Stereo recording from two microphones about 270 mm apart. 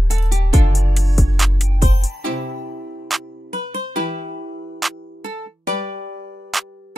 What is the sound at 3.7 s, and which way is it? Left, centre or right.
Music, right.